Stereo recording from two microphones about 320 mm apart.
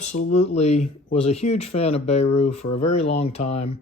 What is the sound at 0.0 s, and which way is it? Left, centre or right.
Speech, left.